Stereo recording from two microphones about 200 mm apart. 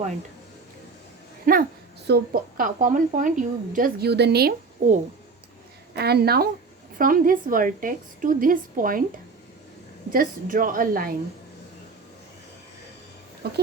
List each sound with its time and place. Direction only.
1.5 s a woman's voice: 40° right (ahead or behind)
4.8 s speech: 35° right (ahead or behind)
5.9 s a woman's voice: 55° right (ahead or behind)
10.1 s a woman's voice: 45° right (ahead or behind)
13.4 s speech: 55° right (ahead or behind)